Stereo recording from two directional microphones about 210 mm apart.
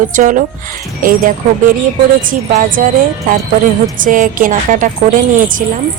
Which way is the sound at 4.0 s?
40° right (ahead or behind).